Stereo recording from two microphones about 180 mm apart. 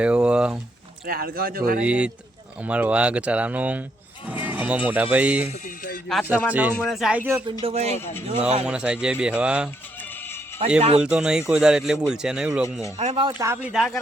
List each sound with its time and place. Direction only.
0.0 s a sound: 5° right (ahead or behind)
1.0 s speech: 55° right (ahead or behind)
1.8 s speech: 5° right (ahead or behind)
5.5 s a sound: 50° left (ahead or behind)
6.5 s speech: 10° right (ahead or behind)
7.6 s speech: 35° right (ahead or behind)
8.6 s speech: 5° right (ahead or behind)
10.8 s speech: 35° right (ahead or behind)
11.0 s speech: 5° right (ahead or behind)
13.0 s speech: 40° right (ahead or behind)
13.2 s speech: 15° right (ahead or behind)
13.7 s speech: centre (ahead or behind)